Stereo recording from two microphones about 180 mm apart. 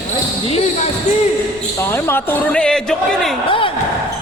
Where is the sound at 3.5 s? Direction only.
30° left (ahead or behind).